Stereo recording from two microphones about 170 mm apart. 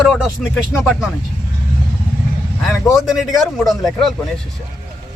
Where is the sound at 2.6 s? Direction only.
Centre (ahead or behind).